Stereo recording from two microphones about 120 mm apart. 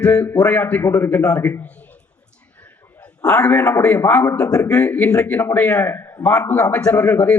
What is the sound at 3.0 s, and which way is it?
A man's voice, 10° left (ahead or behind).